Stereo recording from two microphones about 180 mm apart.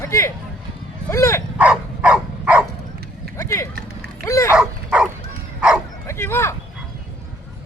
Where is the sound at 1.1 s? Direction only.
15° left (ahead or behind).